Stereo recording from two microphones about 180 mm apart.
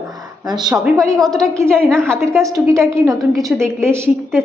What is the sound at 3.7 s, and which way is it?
Speech, 15° right (ahead or behind).